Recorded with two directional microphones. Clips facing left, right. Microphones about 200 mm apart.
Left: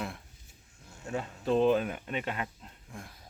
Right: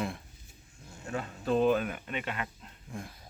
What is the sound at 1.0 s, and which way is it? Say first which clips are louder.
Speech: left 1 dB; 15° left (ahead or behind).